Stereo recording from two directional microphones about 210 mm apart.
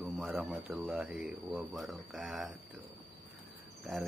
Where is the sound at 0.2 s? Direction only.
Centre (ahead or behind).